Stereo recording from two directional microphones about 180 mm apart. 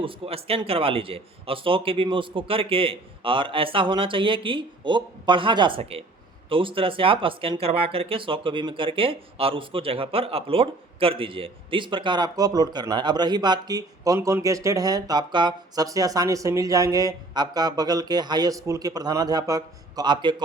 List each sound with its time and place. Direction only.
0.0 s speech: 30° right (ahead or behind)